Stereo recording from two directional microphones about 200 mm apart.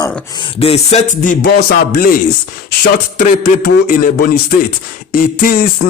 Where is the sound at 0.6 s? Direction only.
30° left (ahead or behind).